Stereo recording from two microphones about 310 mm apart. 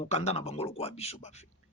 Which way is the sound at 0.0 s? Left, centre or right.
Centre.